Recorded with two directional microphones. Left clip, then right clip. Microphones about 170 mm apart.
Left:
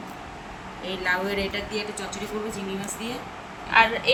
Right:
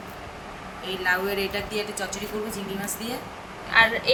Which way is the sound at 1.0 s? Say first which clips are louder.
Right 1 dB; 75° right (ahead or behind).